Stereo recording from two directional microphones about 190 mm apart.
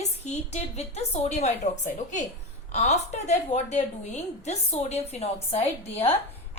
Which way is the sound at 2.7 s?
35° left (ahead or behind).